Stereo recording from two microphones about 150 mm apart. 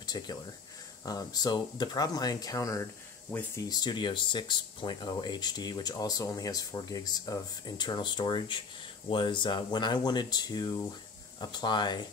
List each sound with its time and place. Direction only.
0.0 s speech: 25° left (ahead or behind)
3.3 s speech: 10° left (ahead or behind)
3.6 s speech: 25° left (ahead or behind)